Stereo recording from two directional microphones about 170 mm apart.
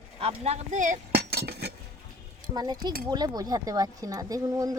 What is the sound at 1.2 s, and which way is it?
Chink, 70° right (ahead or behind).